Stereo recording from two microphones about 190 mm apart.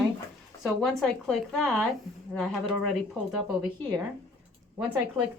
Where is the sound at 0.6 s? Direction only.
Centre (ahead or behind).